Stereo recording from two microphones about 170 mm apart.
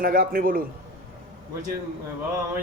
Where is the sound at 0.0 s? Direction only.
55° right (ahead or behind).